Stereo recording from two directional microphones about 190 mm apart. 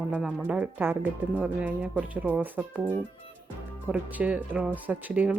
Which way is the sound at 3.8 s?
5° right (ahead or behind).